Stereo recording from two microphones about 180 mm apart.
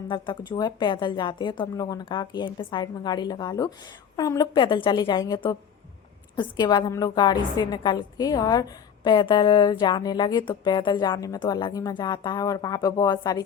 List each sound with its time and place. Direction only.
0.1 s a woman's voice: 25° left (ahead or behind)